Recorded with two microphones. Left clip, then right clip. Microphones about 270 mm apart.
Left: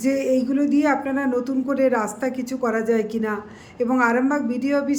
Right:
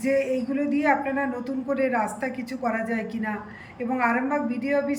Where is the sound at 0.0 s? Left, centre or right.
Centre.